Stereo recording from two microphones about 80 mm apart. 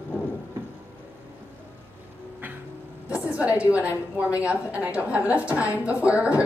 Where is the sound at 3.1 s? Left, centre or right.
Centre.